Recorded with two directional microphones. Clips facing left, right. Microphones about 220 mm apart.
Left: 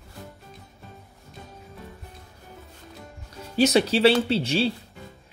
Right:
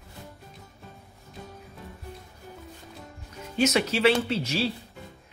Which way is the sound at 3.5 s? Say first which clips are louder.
Left 4 dB; 35° left (ahead or behind).